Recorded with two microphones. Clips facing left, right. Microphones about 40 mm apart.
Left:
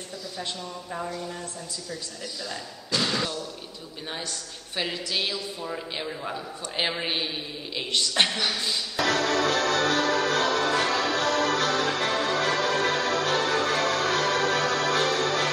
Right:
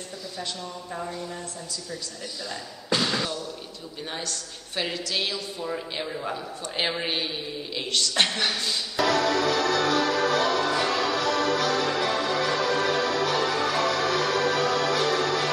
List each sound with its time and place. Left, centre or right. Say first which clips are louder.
3.0 s slam: left 3 dB; centre
4.7 s a woman's voice: even; centre
9.0 s music: right 1 dB; left